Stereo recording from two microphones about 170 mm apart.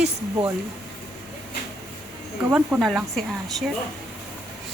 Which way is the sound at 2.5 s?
10° right (ahead or behind).